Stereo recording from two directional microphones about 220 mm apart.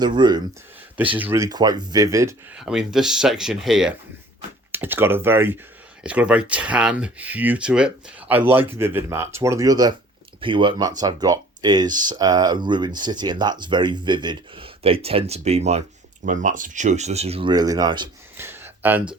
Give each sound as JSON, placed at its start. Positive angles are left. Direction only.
{"t": 0.0, "sound": "speech", "side_deg": -20}
{"t": 0.9, "sound": "speech", "side_deg": -5}
{"t": 2.6, "sound": "speech", "side_deg": -5}